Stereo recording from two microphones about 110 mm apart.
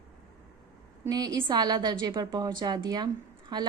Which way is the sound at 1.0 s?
35° right (ahead or behind).